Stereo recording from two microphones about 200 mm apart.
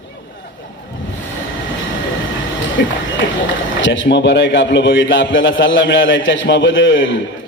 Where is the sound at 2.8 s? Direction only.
60° left (ahead or behind).